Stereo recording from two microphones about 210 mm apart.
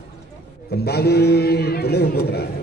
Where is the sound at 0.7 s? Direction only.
50° left (ahead or behind).